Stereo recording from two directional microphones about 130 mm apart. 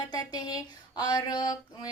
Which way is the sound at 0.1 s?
30° left (ahead or behind).